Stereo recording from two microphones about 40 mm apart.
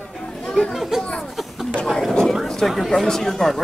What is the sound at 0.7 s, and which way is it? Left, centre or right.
Speech, centre.